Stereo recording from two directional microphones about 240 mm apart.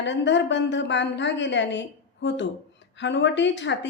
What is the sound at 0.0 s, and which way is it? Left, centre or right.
A woman's voice, left.